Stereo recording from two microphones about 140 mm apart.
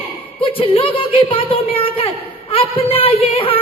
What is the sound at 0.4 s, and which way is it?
A woman's voice, 40° left (ahead or behind).